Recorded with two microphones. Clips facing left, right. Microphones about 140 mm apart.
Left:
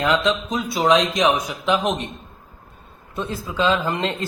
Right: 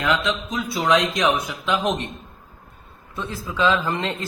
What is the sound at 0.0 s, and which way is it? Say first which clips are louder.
Speech: left 3 dB; 25° left (ahead or behind).